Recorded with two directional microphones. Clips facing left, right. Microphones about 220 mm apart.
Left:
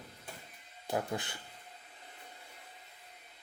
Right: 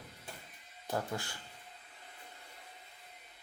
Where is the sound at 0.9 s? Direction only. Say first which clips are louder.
Left 2 dB; 15° left (ahead or behind).